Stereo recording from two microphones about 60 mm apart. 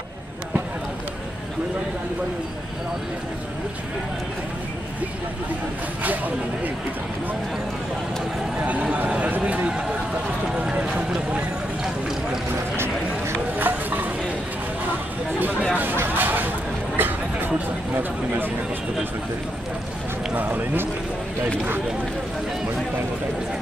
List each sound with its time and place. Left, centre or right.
6.0 s speech: right
8.9 s speech: right
12.7 s a sound: right
15.7 s speech: right
16.1 s a sound: right
20.3 s speech: right